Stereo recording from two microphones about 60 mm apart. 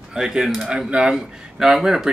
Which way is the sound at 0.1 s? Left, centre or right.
Centre.